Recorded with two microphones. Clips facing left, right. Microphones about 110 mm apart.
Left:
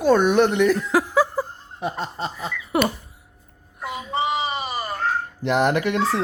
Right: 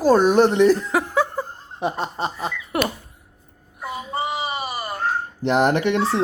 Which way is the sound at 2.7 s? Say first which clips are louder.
Left 2 dB; centre (ahead or behind).